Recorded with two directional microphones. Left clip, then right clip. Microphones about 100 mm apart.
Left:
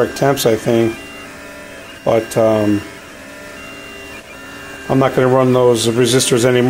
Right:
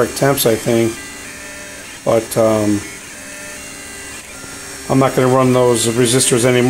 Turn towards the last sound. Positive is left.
turn(degrees=10)  # may be behind; listen again after turning